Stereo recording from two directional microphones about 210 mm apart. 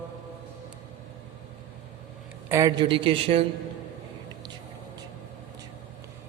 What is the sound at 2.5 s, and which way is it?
Speech, 15° right (ahead or behind).